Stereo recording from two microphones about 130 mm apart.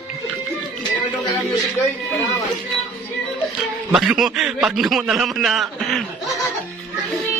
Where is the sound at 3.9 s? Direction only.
5° right (ahead or behind).